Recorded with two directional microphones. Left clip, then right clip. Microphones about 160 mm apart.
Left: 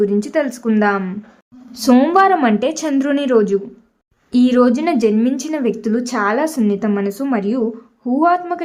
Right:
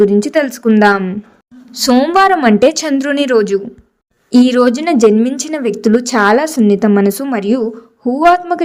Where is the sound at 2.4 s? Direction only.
35° right (ahead or behind).